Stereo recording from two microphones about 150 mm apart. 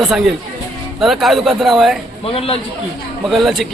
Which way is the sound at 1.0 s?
Centre (ahead or behind).